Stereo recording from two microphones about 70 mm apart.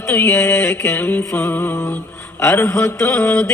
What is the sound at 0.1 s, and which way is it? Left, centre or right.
Mantra, left.